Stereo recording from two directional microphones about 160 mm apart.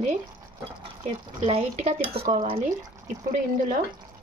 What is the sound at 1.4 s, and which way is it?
Speech, 40° right (ahead or behind).